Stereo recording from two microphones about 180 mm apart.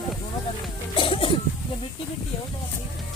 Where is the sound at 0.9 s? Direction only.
30° left (ahead or behind).